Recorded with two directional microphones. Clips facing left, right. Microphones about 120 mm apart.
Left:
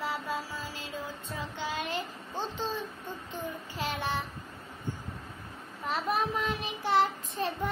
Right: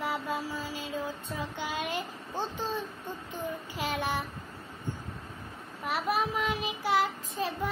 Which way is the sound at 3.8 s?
15° right (ahead or behind).